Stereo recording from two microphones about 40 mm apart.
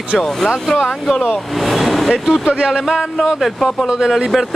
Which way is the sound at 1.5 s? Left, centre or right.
Centre.